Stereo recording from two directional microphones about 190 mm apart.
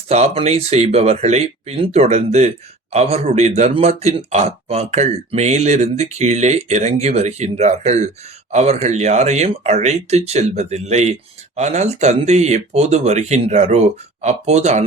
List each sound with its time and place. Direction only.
0.1 s speech: 35° right (ahead or behind)